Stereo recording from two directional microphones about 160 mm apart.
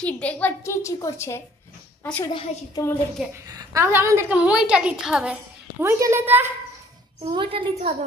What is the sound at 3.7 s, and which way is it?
A woman's voice, 15° right (ahead or behind).